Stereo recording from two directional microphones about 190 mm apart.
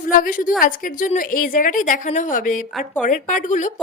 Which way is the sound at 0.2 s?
45° left (ahead or behind).